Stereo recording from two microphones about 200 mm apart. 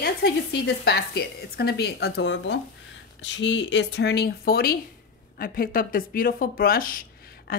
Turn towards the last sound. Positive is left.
turn(degrees=45)  # may be behind; listen again after turning